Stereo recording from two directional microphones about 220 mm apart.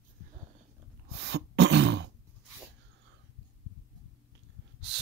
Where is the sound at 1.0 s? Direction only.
50° right (ahead or behind).